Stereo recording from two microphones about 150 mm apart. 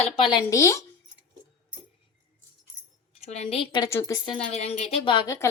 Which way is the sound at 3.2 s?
45° left (ahead or behind).